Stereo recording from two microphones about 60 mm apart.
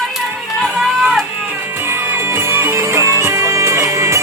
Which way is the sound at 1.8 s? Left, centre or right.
Right.